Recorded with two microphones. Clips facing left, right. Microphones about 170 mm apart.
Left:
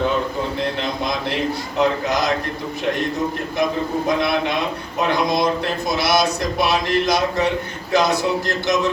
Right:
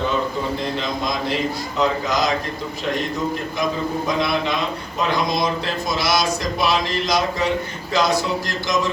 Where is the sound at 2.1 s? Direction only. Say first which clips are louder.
Left 1 dB; 60° left (ahead or behind).